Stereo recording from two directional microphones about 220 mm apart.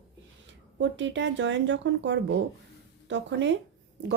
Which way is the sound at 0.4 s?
55° right (ahead or behind).